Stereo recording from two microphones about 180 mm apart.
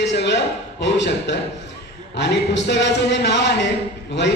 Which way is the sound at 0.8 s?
75° left (ahead or behind).